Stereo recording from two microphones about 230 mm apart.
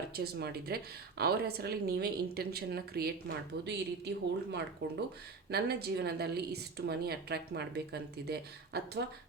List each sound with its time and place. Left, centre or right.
0.1 s a woman's voice: right